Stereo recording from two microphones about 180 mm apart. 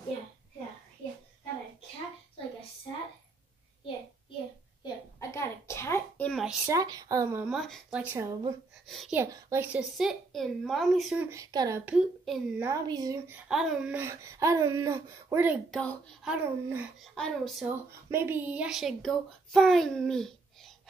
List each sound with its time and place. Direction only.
4.8 s a sound: 15° left (ahead or behind)
6.6 s speech: 20° right (ahead or behind)
7.4 s a woman's voice: centre (ahead or behind)
8.0 s speech: 15° right (ahead or behind)
8.8 s speech: centre (ahead or behind)
9.1 s a woman's voice: 15° right (ahead or behind)
11.2 s speech: 20° right (ahead or behind)
11.8 s speech: 5° right (ahead or behind)
12.6 s speech: 20° right (ahead or behind)
13.3 s speech: 5° right (ahead or behind)
15.7 s a woman's voice: 5° left (ahead or behind)
16.3 s a woman's voice: 10° right (ahead or behind)
17.6 s a woman's voice: 10° right (ahead or behind)